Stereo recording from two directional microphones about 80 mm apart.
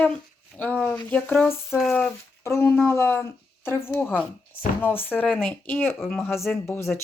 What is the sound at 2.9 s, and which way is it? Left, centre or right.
Speech, left.